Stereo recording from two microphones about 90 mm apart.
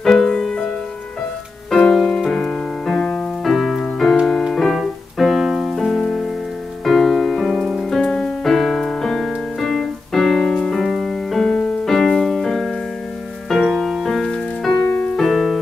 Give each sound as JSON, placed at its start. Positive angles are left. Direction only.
{"t": 0.0, "sound": "music", "side_deg": 5}
{"t": 1.7, "sound": "music", "side_deg": 5}
{"t": 2.3, "sound": "piano", "side_deg": 5}
{"t": 4.5, "sound": "music", "side_deg": 0}
{"t": 11.4, "sound": "music", "side_deg": 10}
{"t": 14.8, "sound": "piano", "side_deg": 15}
{"t": 15.1, "sound": "keyboard", "side_deg": 5}